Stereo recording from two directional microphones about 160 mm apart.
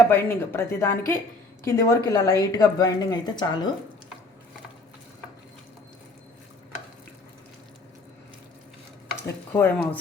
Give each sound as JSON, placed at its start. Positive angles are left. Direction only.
{"t": 0.0, "sound": "a woman's voice", "side_deg": 15}
{"t": 9.6, "sound": "speech", "side_deg": 15}